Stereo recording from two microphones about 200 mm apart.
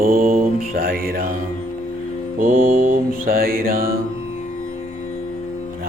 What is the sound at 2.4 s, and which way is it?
Mantra, 45° right (ahead or behind).